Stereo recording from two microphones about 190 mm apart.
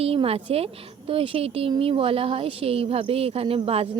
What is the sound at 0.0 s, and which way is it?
A woman's voice, 30° right (ahead or behind).